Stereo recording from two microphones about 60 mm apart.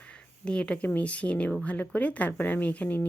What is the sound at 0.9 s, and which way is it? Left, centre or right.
Speech, left.